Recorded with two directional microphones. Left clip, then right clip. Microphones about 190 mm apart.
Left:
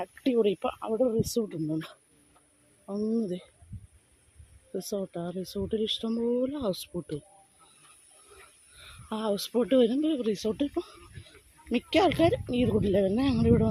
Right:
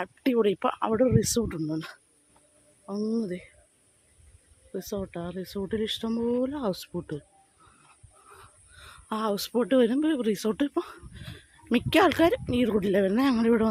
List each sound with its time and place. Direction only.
0.0 s speech: 5° right (ahead or behind)
1.2 s speech: 20° right (ahead or behind)
1.5 s speech: 5° right (ahead or behind)
4.7 s speech: centre (ahead or behind)
8.8 s speech: 5° right (ahead or behind)